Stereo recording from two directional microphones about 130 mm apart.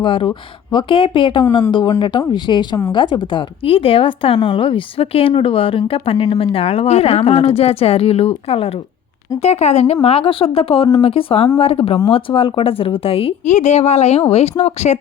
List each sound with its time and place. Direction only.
0.0 s speech: 40° left (ahead or behind)
13.4 s speech: 60° left (ahead or behind)